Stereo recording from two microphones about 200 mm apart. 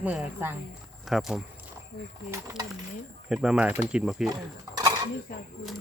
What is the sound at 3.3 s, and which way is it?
Speech, 5° right (ahead or behind).